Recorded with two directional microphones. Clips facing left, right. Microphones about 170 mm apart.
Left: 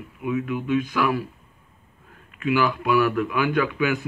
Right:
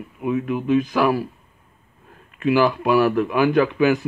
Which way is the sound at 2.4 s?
35° right (ahead or behind).